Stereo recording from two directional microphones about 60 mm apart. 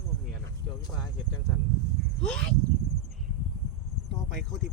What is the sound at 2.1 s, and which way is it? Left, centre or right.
Speech, centre.